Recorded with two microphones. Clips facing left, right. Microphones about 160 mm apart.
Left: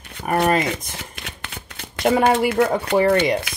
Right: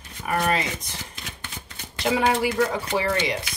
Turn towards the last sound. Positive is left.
turn(degrees=55)  # may be behind; listen again after turning